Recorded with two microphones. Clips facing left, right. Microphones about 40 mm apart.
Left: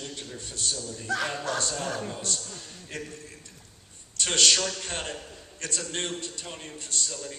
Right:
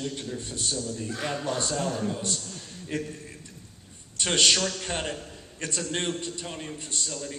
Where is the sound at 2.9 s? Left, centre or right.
Centre.